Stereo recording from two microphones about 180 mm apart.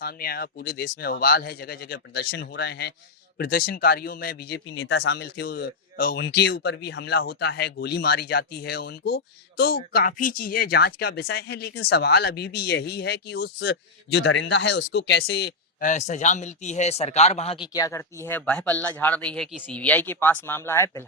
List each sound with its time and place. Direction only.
0.0 s speech: 55° left (ahead or behind)
3.3 s speech: 55° left (ahead or behind)
15.8 s speech: 40° left (ahead or behind)
17.7 s speech: 15° left (ahead or behind)